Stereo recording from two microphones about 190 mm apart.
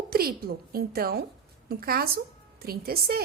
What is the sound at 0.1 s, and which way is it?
A woman's voice, 50° right (ahead or behind).